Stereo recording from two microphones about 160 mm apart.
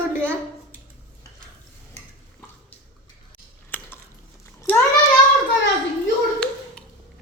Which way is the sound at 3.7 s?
10° left (ahead or behind).